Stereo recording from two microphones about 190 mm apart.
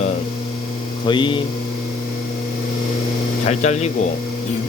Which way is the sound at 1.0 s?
25° left (ahead or behind).